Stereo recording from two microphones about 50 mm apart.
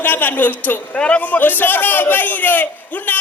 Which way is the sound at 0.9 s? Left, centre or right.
Left.